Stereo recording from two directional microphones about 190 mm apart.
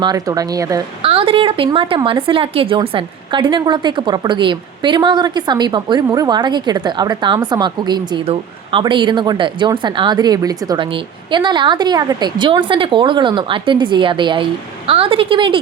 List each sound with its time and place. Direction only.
0.0 s a woman's voice: 20° right (ahead or behind)
1.0 s a woman's voice: 30° right (ahead or behind)